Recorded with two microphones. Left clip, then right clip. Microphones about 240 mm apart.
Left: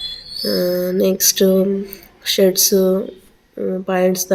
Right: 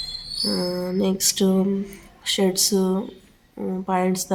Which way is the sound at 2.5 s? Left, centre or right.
Right.